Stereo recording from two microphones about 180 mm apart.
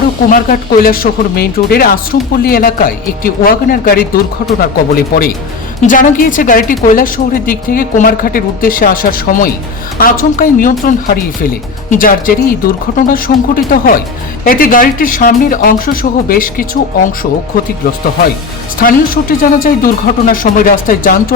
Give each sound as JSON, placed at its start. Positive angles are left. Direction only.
{"t": 0.3, "sound": "speech", "side_deg": 50}
{"t": 18.8, "sound": "speech", "side_deg": 50}